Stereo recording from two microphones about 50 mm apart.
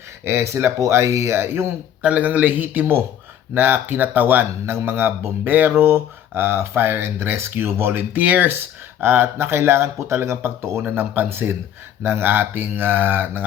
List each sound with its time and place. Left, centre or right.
0.3 s speech: right
2.0 s speech: right
4.6 s speech: right
8.2 s speech: right
9.0 s speech: right
10.9 s speech: right